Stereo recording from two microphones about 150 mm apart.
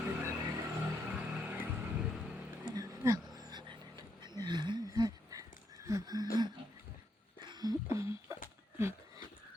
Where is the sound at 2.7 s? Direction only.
25° right (ahead or behind).